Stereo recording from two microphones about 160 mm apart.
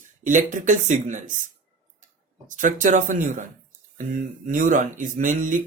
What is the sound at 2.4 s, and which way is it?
Speech, 55° right (ahead or behind).